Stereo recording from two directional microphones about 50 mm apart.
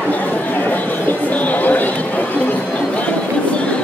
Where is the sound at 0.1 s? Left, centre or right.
Left.